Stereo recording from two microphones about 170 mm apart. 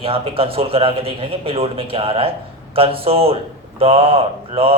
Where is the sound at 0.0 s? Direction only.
35° right (ahead or behind).